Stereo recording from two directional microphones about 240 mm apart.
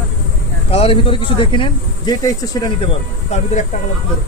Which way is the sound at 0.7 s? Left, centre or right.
Left.